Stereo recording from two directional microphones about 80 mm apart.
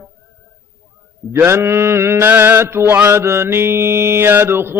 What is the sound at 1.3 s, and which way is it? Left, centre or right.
Mantra, right.